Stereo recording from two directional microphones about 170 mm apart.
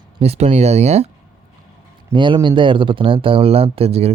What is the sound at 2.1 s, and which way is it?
Speech, 30° right (ahead or behind).